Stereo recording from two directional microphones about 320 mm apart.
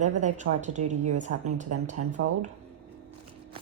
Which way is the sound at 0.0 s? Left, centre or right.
Right.